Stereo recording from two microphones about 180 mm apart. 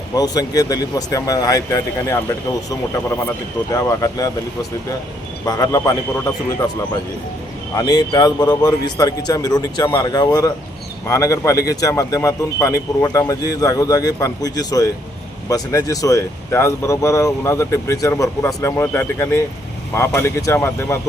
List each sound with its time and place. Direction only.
0.2 s speech: 20° left (ahead or behind)
3.7 s speech: 20° left (ahead or behind)
5.5 s speech: 20° left (ahead or behind)
7.8 s speech: 20° left (ahead or behind)